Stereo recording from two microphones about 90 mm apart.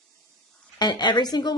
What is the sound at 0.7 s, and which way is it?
Speech, 50° left (ahead or behind).